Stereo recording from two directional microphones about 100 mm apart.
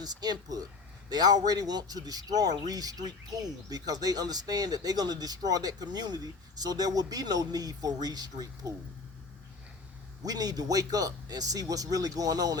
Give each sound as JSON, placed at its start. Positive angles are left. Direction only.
{"t": 0.0, "sound": "speech", "side_deg": -45}
{"t": 10.2, "sound": "speech", "side_deg": -40}